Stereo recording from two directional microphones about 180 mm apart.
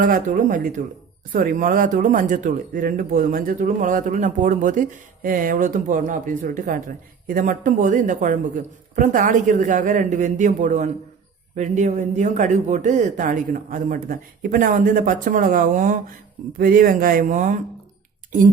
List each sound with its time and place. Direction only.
0.0 s speech: 45° right (ahead or behind)